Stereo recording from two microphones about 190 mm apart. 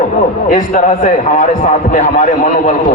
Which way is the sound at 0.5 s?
45° left (ahead or behind).